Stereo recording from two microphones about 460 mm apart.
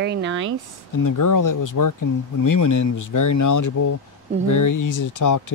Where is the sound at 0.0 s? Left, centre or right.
Right.